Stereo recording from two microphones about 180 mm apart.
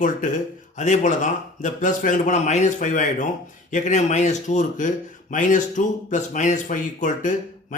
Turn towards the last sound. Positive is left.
turn(degrees=45)  # may be behind; listen again after turning